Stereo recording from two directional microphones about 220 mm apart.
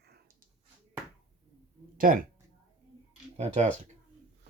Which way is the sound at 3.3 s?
30° right (ahead or behind).